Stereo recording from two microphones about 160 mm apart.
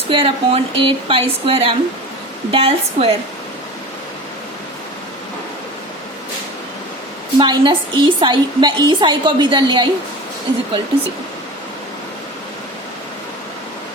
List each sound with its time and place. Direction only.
0.1 s speech: 35° right (ahead or behind)
7.3 s a woman's voice: 30° right (ahead or behind)